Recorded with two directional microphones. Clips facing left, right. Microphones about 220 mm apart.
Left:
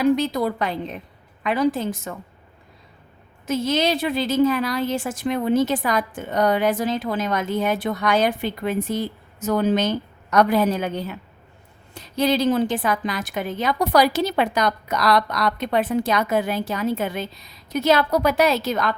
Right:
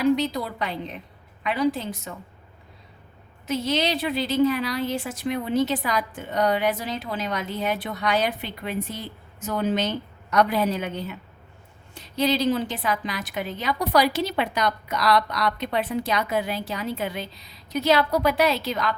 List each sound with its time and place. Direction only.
0.2 s a woman's voice: 50° left (ahead or behind)
3.4 s a woman's voice: 50° left (ahead or behind)
12.1 s a woman's voice: 50° left (ahead or behind)